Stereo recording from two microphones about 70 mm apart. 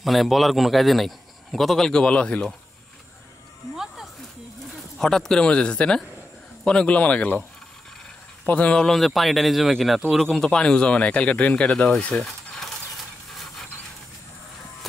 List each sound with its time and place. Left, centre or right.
0.0 s a man's voice: centre
3.7 s snake: centre
4.9 s speech: centre
8.5 s speech: centre
8.8 s a man's voice: centre
10.2 s speech: centre
12.0 s a sound: centre